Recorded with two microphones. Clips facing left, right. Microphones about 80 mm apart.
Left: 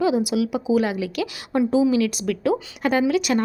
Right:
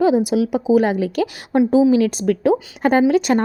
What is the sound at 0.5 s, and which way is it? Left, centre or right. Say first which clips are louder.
Speech: right 7 dB; right.